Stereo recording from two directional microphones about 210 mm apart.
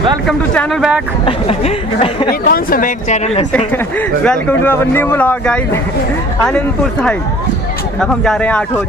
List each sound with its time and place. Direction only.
0.3 s speech: centre (ahead or behind)
1.2 s speech: 25° left (ahead or behind)
2.4 s speech: 45° left (ahead or behind)
3.5 s a man's voice: 5° left (ahead or behind)